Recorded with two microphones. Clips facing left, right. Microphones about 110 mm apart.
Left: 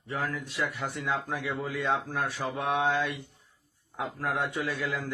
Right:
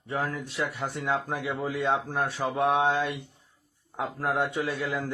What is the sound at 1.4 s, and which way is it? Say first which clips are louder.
Speech: right 2 dB; 25° right (ahead or behind).